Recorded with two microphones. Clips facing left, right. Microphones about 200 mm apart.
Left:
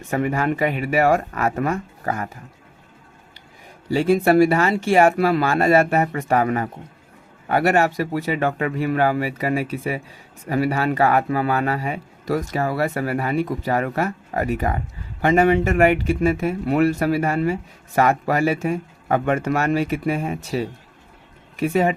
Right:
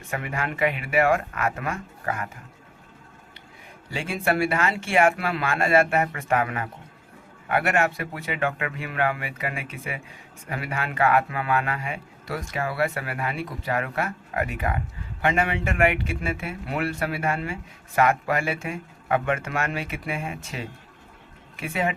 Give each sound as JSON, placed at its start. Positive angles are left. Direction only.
{"t": 0.1, "sound": "speech", "side_deg": 40}
{"t": 3.8, "sound": "speech", "side_deg": 40}
{"t": 21.6, "sound": "speech", "side_deg": 40}